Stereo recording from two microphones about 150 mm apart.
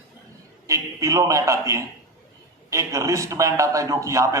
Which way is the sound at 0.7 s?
20° right (ahead or behind).